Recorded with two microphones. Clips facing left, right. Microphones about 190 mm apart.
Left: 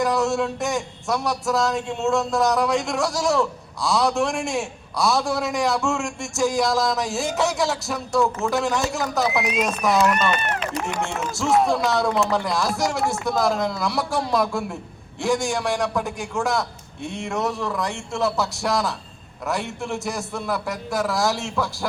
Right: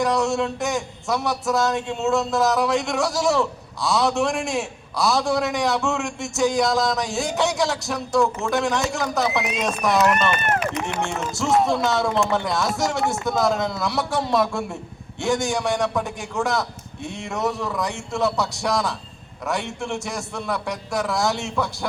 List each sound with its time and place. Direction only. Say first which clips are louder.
0.0 s a man's voice: even; centre (ahead or behind)
10.3 s speech: right 3 dB; 50° right (ahead or behind)
10.8 s a man's voice: even; centre (ahead or behind)